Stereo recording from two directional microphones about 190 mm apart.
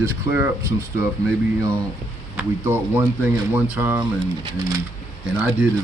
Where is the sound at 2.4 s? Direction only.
10° right (ahead or behind).